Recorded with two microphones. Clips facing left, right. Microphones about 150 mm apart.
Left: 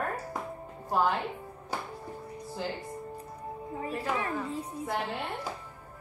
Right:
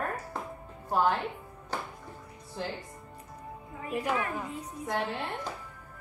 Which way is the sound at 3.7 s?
30° left (ahead or behind).